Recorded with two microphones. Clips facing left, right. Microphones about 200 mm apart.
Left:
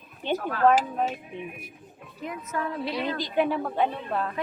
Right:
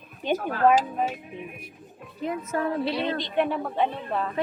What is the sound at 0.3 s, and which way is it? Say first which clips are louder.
Speech: right 1 dB; 10° right (ahead or behind).